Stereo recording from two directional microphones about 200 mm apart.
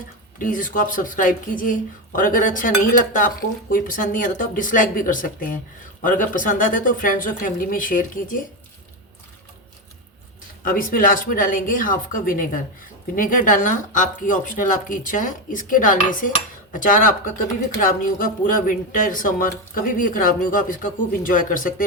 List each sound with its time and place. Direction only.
0.3 s speech: 40° left (ahead or behind)
10.6 s speech: 45° left (ahead or behind)